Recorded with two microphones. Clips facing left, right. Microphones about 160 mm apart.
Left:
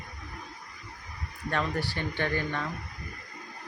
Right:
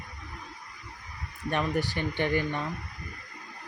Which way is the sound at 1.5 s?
15° right (ahead or behind).